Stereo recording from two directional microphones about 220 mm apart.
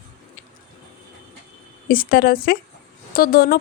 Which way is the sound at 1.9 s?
40° left (ahead or behind).